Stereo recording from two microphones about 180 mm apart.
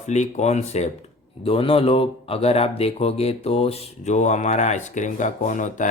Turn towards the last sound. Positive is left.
turn(degrees=45)  # may be behind; listen again after turning